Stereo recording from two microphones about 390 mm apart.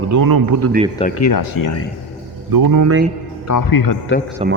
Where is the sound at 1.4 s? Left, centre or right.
Left.